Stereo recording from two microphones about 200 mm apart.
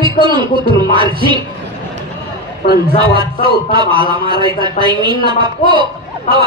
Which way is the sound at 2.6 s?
40° left (ahead or behind).